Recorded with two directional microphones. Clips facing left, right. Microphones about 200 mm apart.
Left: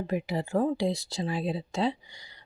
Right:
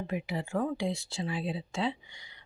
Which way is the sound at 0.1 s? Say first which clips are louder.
Left 5 dB; 40° left (ahead or behind).